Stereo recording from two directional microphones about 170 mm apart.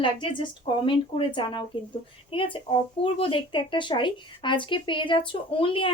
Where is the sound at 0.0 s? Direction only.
30° left (ahead or behind).